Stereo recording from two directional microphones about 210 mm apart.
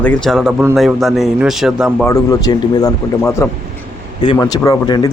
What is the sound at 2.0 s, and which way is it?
Speech, 15° left (ahead or behind).